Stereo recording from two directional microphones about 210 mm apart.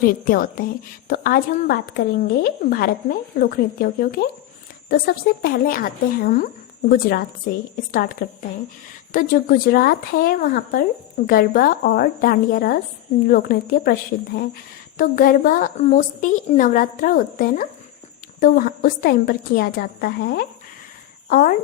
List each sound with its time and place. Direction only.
0.0 s a woman's voice: 45° left (ahead or behind)
14.9 s a woman's voice: 45° left (ahead or behind)